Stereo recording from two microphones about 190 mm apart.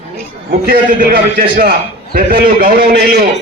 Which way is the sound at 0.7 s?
50° right (ahead or behind).